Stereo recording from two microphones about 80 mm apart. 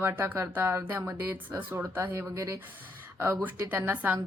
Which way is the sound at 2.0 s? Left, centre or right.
Right.